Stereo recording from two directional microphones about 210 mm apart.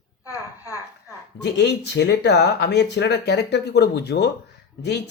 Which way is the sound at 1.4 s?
55° left (ahead or behind).